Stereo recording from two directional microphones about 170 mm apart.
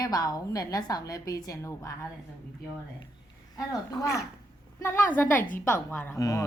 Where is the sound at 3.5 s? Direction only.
20° left (ahead or behind).